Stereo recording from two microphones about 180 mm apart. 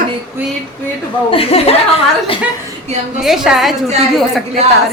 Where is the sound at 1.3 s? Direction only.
30° left (ahead or behind).